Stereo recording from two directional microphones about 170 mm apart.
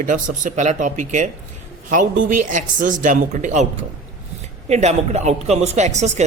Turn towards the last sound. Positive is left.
turn(degrees=-45)  # may be behind; listen again after turning